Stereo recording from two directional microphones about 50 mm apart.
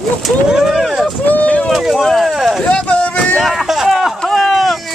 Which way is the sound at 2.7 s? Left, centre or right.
Left.